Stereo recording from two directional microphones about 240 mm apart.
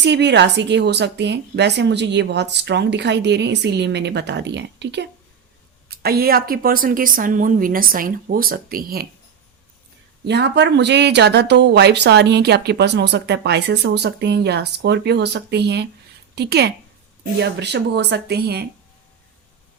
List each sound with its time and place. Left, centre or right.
0.0 s a woman's voice: right
10.2 s a woman's voice: right